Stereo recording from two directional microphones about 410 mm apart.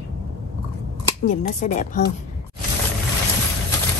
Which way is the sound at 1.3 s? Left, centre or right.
Centre.